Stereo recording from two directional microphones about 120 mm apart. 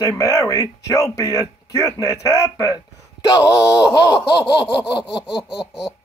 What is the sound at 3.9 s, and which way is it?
Laughter, 35° left (ahead or behind).